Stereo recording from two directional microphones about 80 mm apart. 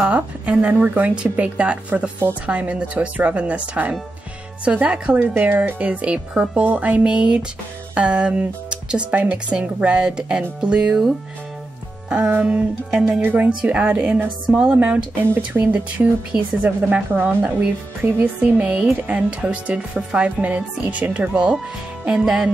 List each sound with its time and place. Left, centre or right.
0.0 s speech: centre
12.1 s speech: centre
13.2 s speech: right; by 22.5 s centre